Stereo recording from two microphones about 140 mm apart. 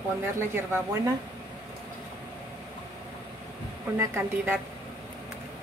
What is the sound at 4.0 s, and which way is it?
Speech, 20° right (ahead or behind).